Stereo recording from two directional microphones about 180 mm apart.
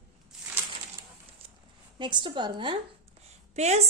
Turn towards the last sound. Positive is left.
turn(degrees=-40)  # may be behind; listen again after turning